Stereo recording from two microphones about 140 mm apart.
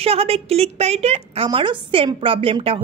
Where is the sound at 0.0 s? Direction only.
45° right (ahead or behind).